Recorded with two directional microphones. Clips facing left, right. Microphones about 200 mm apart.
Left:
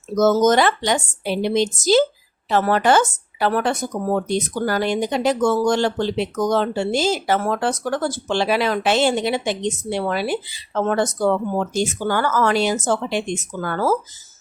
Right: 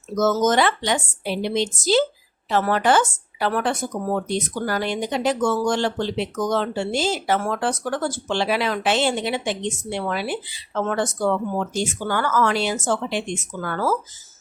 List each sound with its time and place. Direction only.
0.2 s speech: 35° left (ahead or behind)